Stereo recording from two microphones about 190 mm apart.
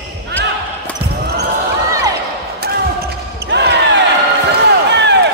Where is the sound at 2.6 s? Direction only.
55° right (ahead or behind).